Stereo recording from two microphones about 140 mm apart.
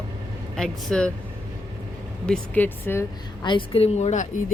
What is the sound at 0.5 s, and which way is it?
Speech, 5° left (ahead or behind).